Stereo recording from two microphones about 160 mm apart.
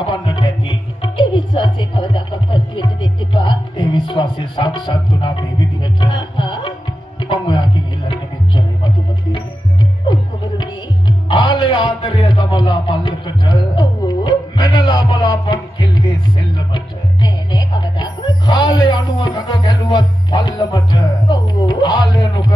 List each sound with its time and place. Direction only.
0.0 s music: 30° left (ahead or behind)